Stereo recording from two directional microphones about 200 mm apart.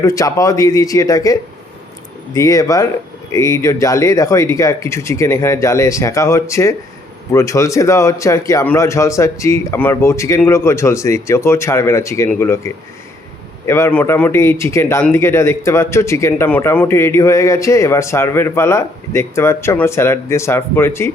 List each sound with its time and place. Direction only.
0.0 s speech: 15° left (ahead or behind)